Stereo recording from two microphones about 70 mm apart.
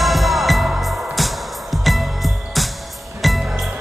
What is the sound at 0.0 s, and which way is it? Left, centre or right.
Music, centre.